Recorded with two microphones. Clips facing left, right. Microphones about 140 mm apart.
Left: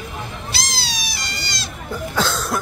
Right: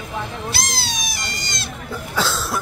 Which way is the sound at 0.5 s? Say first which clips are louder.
Right 2 dB; 50° right (ahead or behind).